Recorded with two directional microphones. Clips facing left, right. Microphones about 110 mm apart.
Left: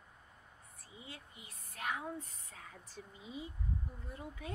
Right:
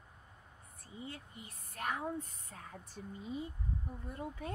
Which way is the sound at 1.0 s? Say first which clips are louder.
Right 6 dB; 45° right (ahead or behind).